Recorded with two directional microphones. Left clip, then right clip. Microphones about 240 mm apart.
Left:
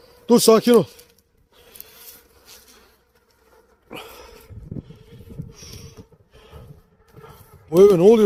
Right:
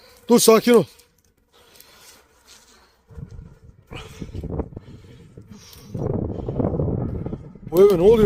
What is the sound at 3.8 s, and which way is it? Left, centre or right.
Dog, centre.